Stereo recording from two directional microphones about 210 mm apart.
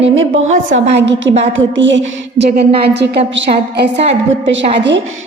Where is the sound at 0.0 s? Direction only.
65° right (ahead or behind).